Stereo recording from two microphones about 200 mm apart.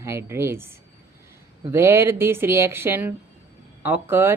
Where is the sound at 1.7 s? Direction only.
15° right (ahead or behind).